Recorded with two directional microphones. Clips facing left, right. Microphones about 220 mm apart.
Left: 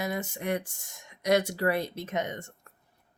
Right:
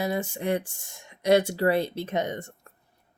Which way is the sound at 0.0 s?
30° right (ahead or behind).